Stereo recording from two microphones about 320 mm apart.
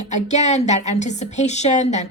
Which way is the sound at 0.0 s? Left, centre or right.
Left.